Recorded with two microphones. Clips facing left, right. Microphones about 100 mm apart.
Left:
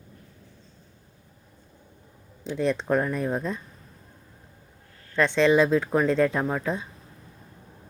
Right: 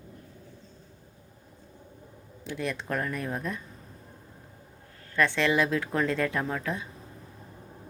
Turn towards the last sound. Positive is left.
turn(degrees=20)  # may be behind; listen again after turning